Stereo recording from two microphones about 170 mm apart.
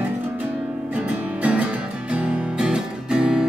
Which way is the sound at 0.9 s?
5° right (ahead or behind).